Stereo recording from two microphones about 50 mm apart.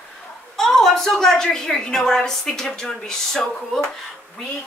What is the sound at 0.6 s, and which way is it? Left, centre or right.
A woman's voice, centre.